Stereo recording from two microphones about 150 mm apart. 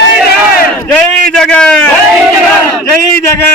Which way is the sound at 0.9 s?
10° left (ahead or behind).